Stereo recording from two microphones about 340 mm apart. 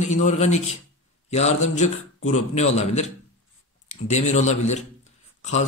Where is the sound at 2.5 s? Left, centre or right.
Centre.